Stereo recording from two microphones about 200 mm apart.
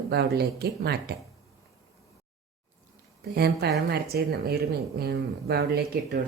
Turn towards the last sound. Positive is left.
turn(degrees=-55)  # may be behind; listen again after turning